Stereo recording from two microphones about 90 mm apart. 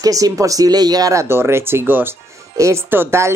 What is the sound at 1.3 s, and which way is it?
Speech, 25° right (ahead or behind).